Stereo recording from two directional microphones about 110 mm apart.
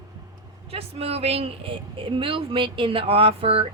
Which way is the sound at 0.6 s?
65° right (ahead or behind).